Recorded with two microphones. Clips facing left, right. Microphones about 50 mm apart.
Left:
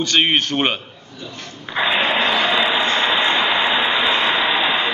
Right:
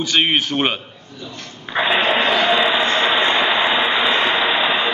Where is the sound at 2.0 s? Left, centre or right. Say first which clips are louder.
Right 1 dB; centre.